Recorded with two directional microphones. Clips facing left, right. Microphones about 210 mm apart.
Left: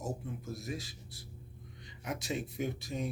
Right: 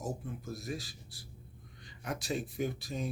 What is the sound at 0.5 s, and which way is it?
Speech, 20° left (ahead or behind).